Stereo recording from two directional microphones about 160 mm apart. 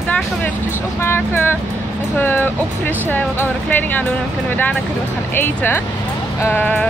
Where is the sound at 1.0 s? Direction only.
15° left (ahead or behind).